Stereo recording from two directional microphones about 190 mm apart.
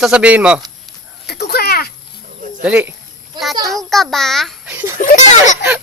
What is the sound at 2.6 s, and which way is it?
Speech, 10° right (ahead or behind).